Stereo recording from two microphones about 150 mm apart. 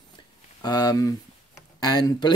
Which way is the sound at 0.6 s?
25° left (ahead or behind).